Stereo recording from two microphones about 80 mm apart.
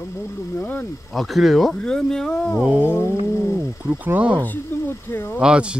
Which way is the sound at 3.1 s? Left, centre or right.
Right.